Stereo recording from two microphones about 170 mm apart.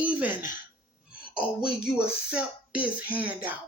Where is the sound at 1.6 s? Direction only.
5° right (ahead or behind).